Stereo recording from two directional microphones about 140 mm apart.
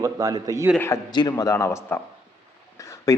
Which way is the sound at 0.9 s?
20° left (ahead or behind).